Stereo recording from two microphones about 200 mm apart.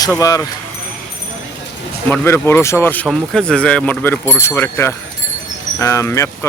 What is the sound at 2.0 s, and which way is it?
Speech, 10° left (ahead or behind).